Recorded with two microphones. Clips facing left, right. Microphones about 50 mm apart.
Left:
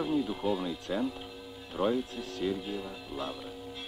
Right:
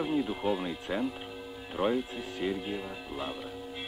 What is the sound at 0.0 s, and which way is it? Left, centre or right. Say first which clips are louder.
Speech: even; right.